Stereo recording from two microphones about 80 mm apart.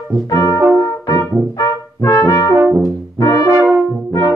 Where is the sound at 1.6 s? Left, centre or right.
Left.